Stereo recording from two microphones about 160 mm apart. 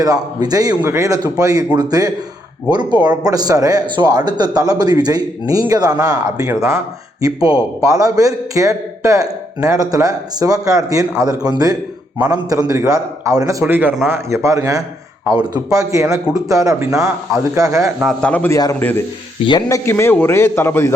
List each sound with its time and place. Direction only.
0.0 s a man's voice: 25° right (ahead or behind)
18.0 s a man's voice: 5° left (ahead or behind)
18.5 s a man's voice: 20° left (ahead or behind)